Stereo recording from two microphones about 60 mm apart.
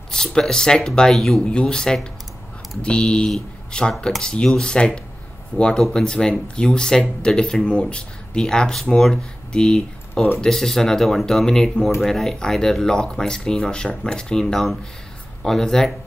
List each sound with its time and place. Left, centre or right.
0.1 s speech: centre